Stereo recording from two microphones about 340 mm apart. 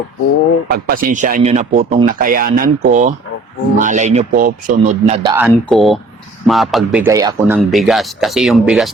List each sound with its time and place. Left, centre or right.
0.7 s speech: right; by 5.5 s centre
5.5 s speech: centre